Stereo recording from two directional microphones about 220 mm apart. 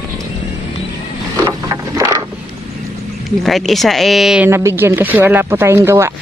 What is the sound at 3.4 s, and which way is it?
Speech, centre (ahead or behind).